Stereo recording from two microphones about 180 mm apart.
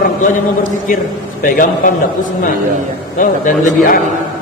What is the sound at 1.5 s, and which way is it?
Speech, 50° left (ahead or behind).